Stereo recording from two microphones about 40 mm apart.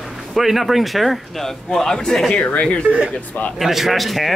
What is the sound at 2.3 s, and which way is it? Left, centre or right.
Speech, left.